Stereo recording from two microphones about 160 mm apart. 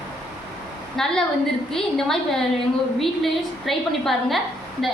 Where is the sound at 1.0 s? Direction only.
5° left (ahead or behind).